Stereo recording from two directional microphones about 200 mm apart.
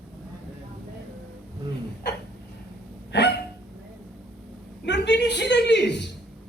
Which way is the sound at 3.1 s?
60° left (ahead or behind).